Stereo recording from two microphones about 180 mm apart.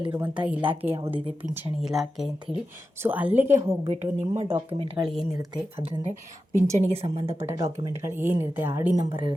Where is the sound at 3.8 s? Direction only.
35° right (ahead or behind).